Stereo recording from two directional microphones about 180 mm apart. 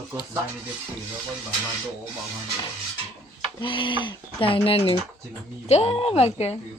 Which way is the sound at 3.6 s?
25° left (ahead or behind).